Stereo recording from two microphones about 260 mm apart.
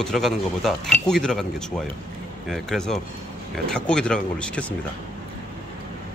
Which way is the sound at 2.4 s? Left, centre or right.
Centre.